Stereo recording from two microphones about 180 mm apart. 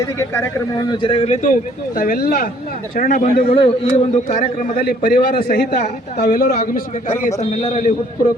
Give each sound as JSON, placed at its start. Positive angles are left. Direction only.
{"t": 0.2, "sound": "speech", "side_deg": 20}
{"t": 2.0, "sound": "a man's voice", "side_deg": 55}
{"t": 3.4, "sound": "a man's voice", "side_deg": 30}
{"t": 7.3, "sound": "speech", "side_deg": 40}